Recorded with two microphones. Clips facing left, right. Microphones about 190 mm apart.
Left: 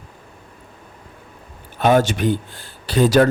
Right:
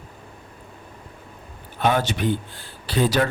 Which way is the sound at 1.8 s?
45° left (ahead or behind).